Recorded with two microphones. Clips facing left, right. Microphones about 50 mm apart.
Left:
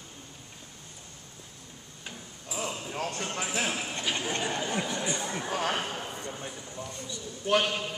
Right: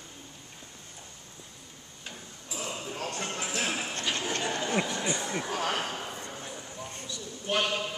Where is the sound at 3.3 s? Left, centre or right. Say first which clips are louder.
Left 2 dB; centre.